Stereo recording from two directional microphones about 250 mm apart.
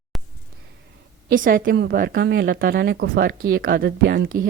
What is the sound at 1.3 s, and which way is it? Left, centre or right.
Speech, right.